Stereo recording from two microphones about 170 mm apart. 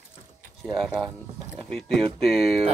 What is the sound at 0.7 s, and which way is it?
Speech, centre (ahead or behind).